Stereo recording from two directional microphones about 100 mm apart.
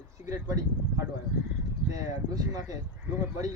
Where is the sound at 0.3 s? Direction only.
35° right (ahead or behind).